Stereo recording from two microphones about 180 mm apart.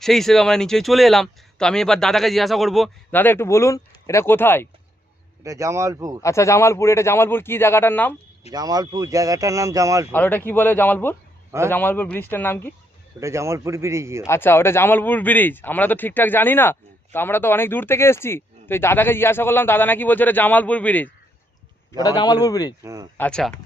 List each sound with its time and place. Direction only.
0.0 s speech: centre (ahead or behind)
3.1 s speech: 10° left (ahead or behind)
5.4 s speech: 15° right (ahead or behind)
6.2 s speech: 15° left (ahead or behind)
8.5 s speech: 20° right (ahead or behind)
10.1 s speech: 10° left (ahead or behind)
13.1 s speech: 15° right (ahead or behind)
14.3 s speech: 15° left (ahead or behind)
21.9 s a man's voice: 20° left (ahead or behind)
22.8 s speech: 15° right (ahead or behind)
23.1 s speech: 5° left (ahead or behind)